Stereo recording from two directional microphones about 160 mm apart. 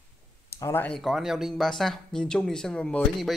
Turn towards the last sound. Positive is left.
turn(degrees=5)  # may be behind; listen again after turning